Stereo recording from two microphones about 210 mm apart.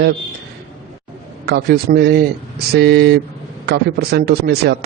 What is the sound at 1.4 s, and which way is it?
Speech, 50° right (ahead or behind).